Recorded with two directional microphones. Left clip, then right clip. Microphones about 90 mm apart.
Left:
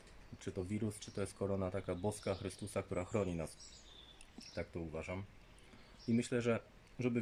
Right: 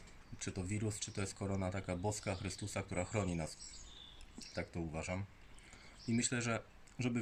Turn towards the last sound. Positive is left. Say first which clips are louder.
# left 2 dB
turn(degrees=15)  # may be behind; listen again after turning